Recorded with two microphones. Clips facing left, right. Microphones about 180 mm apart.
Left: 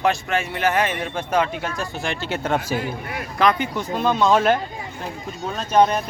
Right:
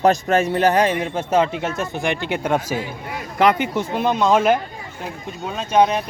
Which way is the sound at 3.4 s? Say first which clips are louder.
Right 3 dB; 20° right (ahead or behind).